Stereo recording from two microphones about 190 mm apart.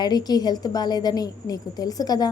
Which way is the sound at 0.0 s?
20° left (ahead or behind).